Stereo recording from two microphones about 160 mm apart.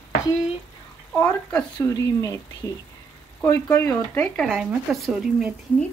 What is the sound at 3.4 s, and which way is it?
Speech, 15° left (ahead or behind).